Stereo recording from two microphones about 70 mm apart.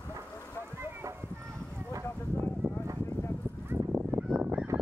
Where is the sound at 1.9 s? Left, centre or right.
Right.